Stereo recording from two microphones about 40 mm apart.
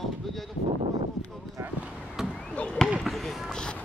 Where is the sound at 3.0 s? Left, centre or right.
Centre.